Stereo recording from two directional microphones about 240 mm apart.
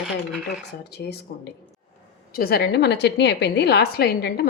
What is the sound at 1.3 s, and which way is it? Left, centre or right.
A woman's voice, left.